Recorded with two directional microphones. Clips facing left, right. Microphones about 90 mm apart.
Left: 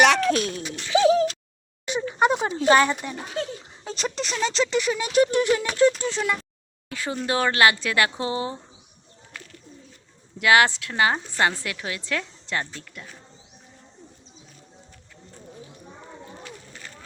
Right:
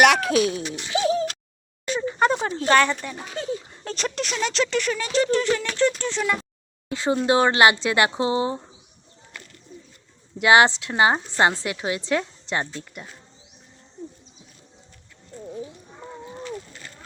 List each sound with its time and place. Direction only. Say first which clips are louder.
0.0 s a sound: right 2 dB; 5° right (ahead or behind)
2.1 s a sound: left 1 dB; 10° left (ahead or behind)
2.6 s speech: left 1 dB; 10° left (ahead or behind)
3.4 s speech: right 3 dB; centre (ahead or behind)
5.8 s speech: left 2 dB; 5° left (ahead or behind)
6.8 s a woman's voice: right 7 dB; 25° right (ahead or behind)
10.3 s a woman's voice: right 2 dB; 25° right (ahead or behind)